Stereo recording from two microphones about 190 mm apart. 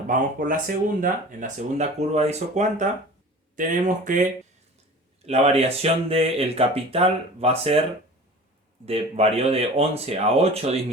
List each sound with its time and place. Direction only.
0.1 s speech: 45° right (ahead or behind)
8.9 s speech: 30° right (ahead or behind)